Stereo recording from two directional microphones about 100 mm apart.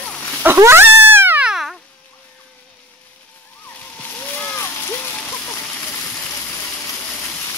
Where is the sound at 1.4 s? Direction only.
5° right (ahead or behind).